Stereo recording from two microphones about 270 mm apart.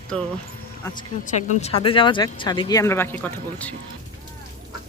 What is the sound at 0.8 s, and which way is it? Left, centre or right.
Speech, centre.